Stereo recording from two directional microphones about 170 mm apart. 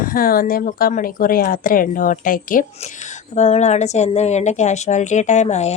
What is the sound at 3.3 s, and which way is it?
A woman's voice, 40° left (ahead or behind).